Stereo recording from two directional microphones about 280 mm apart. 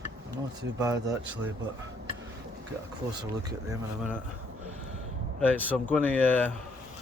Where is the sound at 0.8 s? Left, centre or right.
Centre.